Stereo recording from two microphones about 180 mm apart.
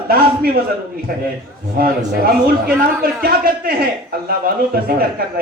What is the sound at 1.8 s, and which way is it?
A man's voice, 55° right (ahead or behind).